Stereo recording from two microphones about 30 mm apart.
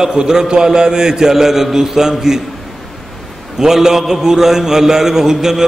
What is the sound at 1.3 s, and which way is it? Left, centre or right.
A man's voice, centre.